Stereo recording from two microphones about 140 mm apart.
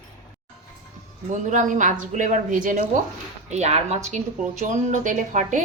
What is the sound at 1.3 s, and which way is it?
Speech, 65° right (ahead or behind).